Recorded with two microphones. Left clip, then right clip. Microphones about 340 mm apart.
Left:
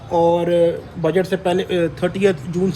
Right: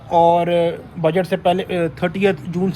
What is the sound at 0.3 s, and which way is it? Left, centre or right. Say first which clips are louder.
Speech: left 1 dB; centre.